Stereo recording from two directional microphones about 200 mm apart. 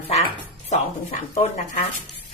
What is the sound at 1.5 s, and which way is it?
Speech, 35° left (ahead or behind).